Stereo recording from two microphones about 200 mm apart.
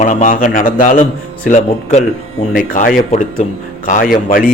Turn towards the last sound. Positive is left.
turn(degrees=45)  # may be behind; listen again after turning